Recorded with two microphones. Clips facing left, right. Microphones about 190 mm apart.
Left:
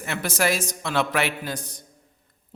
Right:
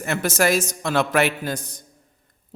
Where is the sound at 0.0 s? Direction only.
45° right (ahead or behind).